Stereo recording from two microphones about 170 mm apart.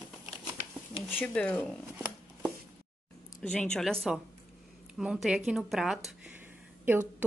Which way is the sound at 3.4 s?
5° left (ahead or behind).